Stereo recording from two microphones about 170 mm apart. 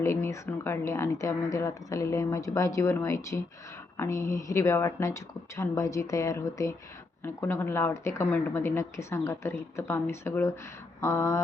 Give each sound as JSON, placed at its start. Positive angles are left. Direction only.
{"t": 0.0, "sound": "speech", "side_deg": 15}